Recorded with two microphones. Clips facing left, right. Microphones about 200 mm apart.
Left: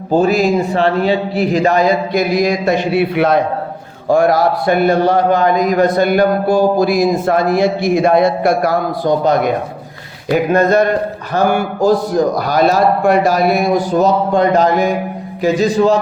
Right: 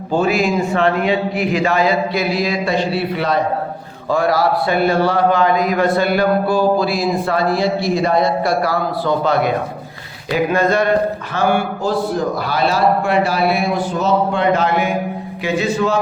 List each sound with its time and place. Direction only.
0.1 s a man's voice: 40° left (ahead or behind)